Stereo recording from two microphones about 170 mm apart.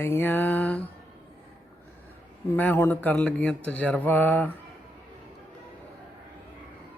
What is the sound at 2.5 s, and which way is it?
Speech, 10° left (ahead or behind).